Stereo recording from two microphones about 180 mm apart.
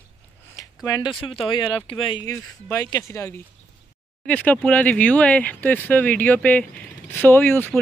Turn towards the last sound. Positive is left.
turn(degrees=10)  # may be behind; listen again after turning